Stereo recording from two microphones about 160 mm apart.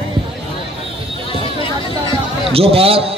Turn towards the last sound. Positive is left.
turn(degrees=-35)  # may be behind; listen again after turning